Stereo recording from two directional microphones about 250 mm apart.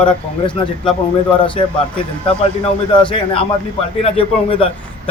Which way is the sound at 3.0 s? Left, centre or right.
Left.